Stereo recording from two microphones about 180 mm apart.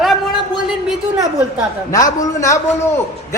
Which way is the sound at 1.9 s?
20° left (ahead or behind).